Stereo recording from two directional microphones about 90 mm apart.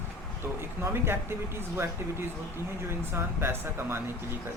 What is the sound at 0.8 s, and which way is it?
Speech, 25° right (ahead or behind).